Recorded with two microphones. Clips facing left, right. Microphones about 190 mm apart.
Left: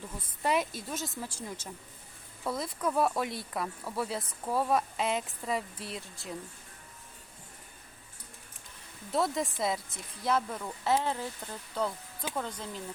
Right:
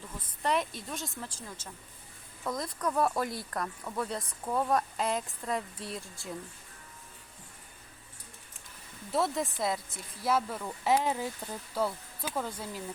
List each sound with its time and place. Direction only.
0.2 s a woman's voice: 5° left (ahead or behind)
9.1 s speech: centre (ahead or behind)